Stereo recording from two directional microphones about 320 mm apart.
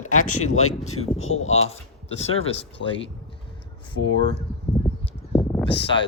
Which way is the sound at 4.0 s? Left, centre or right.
Left.